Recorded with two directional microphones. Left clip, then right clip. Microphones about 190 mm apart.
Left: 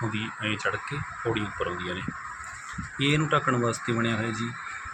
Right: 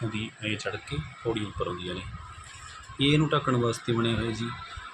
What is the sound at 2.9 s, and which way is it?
Speech, 15° right (ahead or behind).